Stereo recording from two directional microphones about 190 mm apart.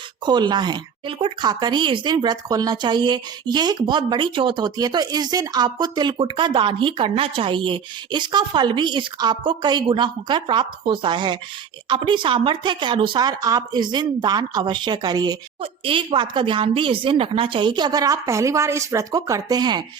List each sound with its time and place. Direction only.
0.3 s speech: 25° right (ahead or behind)